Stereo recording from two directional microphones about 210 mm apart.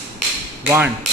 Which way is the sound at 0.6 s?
10° right (ahead or behind).